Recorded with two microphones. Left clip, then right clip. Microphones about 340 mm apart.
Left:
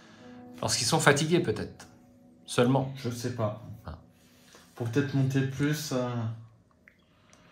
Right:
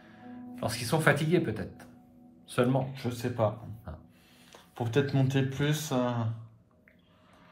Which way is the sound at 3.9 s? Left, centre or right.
Centre.